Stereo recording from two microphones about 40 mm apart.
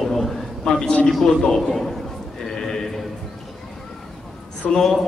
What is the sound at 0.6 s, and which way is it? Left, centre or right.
Speech, centre.